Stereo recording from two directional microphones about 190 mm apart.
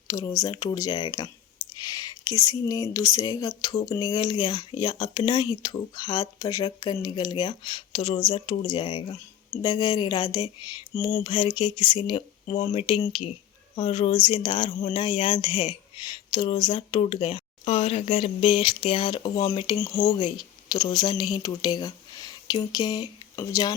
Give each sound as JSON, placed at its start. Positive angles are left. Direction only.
{"t": 0.1, "sound": "speech", "side_deg": 15}
{"t": 1.7, "sound": "clicking", "side_deg": 20}
{"t": 2.4, "sound": "speech", "side_deg": 20}